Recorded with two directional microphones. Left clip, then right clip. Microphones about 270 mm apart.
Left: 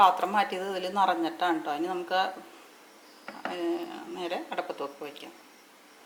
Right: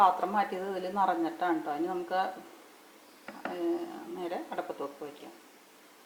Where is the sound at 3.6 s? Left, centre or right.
Right.